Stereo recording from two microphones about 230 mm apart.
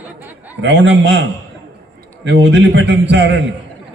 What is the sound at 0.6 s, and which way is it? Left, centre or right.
A man's voice, right.